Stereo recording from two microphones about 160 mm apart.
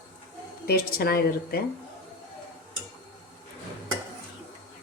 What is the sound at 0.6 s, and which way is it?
A woman's voice, 70° left (ahead or behind).